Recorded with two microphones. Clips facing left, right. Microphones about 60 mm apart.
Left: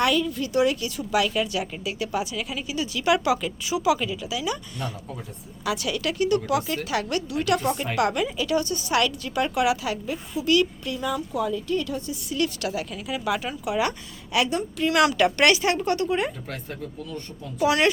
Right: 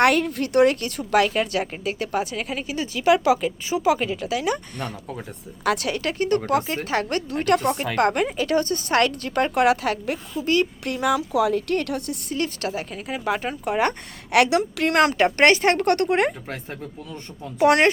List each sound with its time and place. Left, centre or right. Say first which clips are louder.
0.0 s speech: right 4 dB; right
10.4 s speech: even; right
10.8 s a woman's voice: right 5 dB; right
12.3 s speech: even; right
14.3 s a woman's voice: right 6 dB; right
14.9 s speech: right 1 dB; right
17.6 s speech: right 5 dB; right